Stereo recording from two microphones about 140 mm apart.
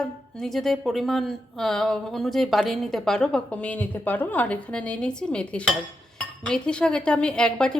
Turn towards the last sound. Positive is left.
turn(degrees=5)  # may be behind; listen again after turning